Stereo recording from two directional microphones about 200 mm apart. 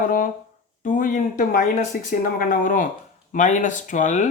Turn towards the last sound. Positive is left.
turn(degrees=40)  # may be behind; listen again after turning